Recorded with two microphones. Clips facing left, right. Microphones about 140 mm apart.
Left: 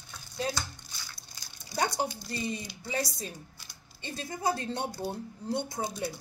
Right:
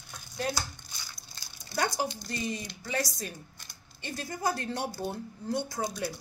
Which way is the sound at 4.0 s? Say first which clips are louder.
Right 1 dB; 25° left (ahead or behind).